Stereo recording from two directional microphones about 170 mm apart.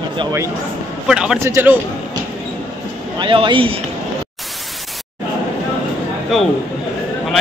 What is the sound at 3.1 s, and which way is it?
Speech, 30° right (ahead or behind).